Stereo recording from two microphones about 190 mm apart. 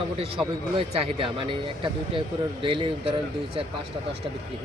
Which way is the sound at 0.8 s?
30° right (ahead or behind).